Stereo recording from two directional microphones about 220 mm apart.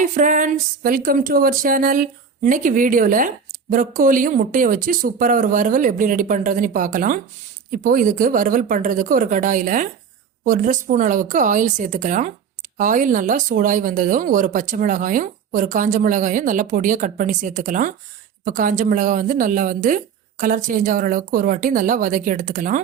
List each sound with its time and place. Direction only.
0.0 s speech: 35° right (ahead or behind)